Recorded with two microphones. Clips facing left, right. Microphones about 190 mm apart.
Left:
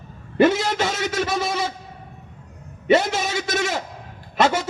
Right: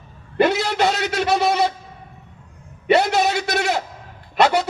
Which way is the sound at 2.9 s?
65° right (ahead or behind).